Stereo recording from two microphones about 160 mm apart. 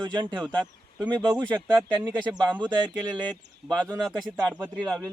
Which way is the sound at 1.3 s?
25° right (ahead or behind).